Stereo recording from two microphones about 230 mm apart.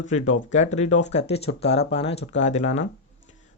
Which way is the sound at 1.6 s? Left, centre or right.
Left.